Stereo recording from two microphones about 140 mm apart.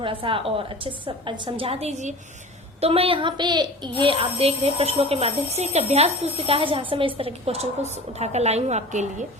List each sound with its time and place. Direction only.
0.0 s a woman's voice: 40° right (ahead or behind); by 2.1 s 55° right (ahead or behind)
2.8 s a woman's voice: 45° right (ahead or behind)